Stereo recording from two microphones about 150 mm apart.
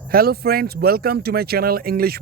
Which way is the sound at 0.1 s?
85° right.